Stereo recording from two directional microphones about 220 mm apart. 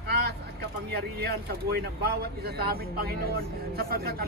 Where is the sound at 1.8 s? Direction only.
45° right (ahead or behind).